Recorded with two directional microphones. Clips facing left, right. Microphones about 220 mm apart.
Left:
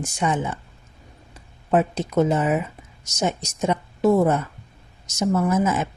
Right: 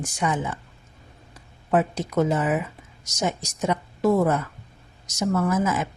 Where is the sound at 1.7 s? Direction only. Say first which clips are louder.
Left 2 dB; 25° left (ahead or behind).